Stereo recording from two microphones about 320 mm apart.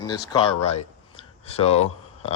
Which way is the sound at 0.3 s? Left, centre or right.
Centre.